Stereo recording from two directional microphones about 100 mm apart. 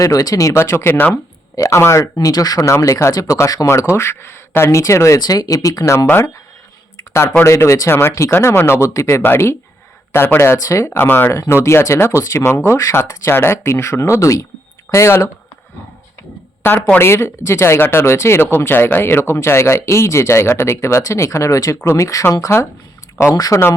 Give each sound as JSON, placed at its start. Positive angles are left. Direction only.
{"t": 0.0, "sound": "speech", "side_deg": 35}
{"t": 16.6, "sound": "speech", "side_deg": 20}